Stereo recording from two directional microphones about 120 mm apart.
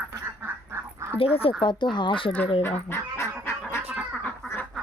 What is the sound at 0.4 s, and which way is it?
Duck, 15° right (ahead or behind).